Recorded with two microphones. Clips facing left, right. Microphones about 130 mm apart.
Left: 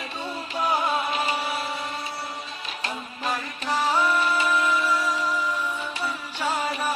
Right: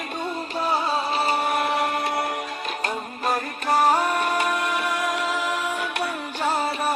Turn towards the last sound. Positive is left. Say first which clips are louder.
# right 3 dB
turn(degrees=-40)  # may be behind; listen again after turning